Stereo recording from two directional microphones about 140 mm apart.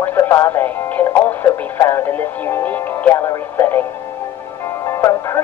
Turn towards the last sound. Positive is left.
turn(degrees=20)  # may be behind; listen again after turning